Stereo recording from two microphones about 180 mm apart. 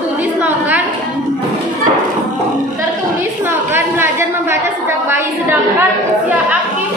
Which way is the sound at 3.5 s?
10° right (ahead or behind).